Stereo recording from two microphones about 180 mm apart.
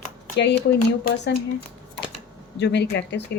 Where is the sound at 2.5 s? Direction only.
70° left (ahead or behind).